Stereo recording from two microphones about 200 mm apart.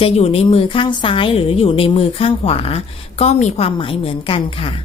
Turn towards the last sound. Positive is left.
turn(degrees=25)  # may be behind; listen again after turning